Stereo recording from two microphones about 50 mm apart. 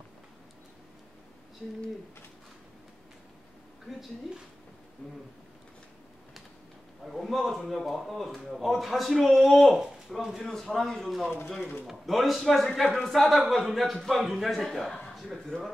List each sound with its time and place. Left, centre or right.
3.9 s a man's voice: centre
5.0 s speech: left
7.1 s a man's voice: centre
10.4 s a man's voice: centre
15.5 s speech: centre